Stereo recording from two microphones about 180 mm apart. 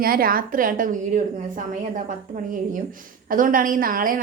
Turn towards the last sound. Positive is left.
turn(degrees=-50)  # may be behind; listen again after turning